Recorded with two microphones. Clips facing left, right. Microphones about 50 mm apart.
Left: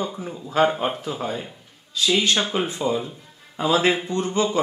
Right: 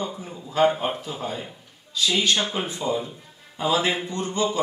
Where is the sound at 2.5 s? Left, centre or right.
Left.